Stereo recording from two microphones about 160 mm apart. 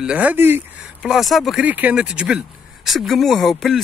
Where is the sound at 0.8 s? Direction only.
Centre (ahead or behind).